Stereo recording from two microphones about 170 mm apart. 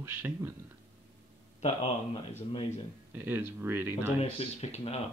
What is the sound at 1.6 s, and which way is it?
Speech, 35° left (ahead or behind).